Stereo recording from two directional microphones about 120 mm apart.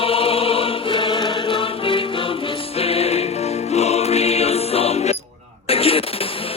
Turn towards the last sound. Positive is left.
turn(degrees=50)  # may be behind; listen again after turning